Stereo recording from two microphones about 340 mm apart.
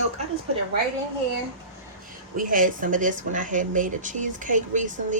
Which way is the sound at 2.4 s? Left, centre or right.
Right.